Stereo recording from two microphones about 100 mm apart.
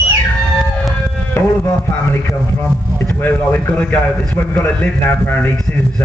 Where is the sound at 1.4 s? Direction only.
25° left (ahead or behind).